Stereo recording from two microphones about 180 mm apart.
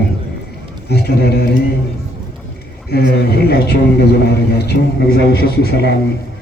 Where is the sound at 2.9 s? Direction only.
60° left (ahead or behind).